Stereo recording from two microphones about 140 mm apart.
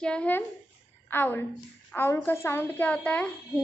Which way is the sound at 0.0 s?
10° left (ahead or behind).